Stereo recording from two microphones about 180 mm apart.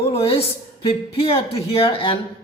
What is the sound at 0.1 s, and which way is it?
Speech, 30° left (ahead or behind).